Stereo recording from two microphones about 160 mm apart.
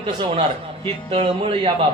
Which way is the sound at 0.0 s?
35° right (ahead or behind).